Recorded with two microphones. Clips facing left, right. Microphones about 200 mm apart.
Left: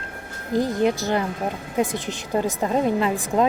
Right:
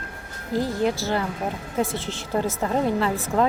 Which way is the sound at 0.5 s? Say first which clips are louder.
Left 3 dB; 20° left (ahead or behind).